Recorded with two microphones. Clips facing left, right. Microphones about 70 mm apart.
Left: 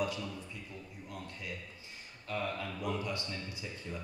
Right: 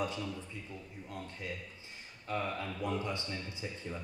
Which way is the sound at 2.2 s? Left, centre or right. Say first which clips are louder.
Right 1 dB; right.